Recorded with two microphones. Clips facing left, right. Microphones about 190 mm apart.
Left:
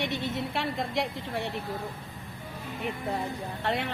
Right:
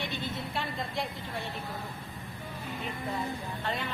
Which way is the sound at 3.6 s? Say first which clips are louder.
Left 6 dB; 75° left (ahead or behind).